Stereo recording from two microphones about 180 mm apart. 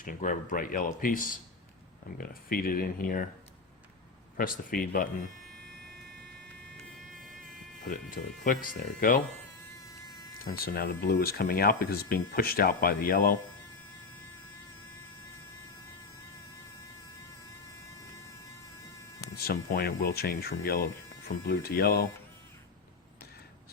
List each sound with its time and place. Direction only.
0.0 s speech: 50° left (ahead or behind)
4.4 s speech: 50° left (ahead or behind)
7.9 s speech: 50° left (ahead or behind)
10.4 s speech: 55° left (ahead or behind)
19.4 s speech: 55° left (ahead or behind)